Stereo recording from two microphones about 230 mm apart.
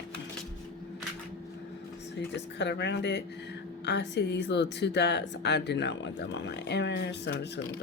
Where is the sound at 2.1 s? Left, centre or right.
Left.